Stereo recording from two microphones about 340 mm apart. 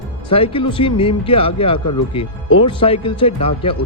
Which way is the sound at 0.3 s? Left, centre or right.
Centre.